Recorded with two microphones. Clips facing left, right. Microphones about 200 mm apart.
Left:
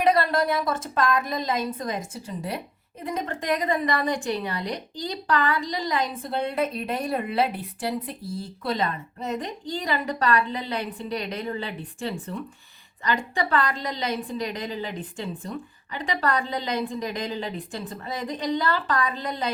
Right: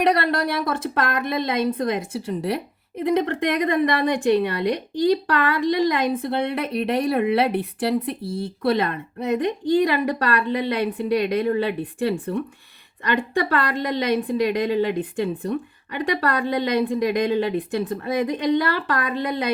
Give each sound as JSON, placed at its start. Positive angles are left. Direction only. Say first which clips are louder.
{"t": 0.0, "sound": "a woman's voice", "louder": "right 1 dB", "side_deg": -70}